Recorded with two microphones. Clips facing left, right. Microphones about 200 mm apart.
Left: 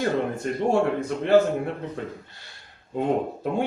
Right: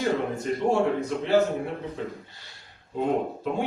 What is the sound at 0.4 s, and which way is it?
Speech, 60° left (ahead or behind).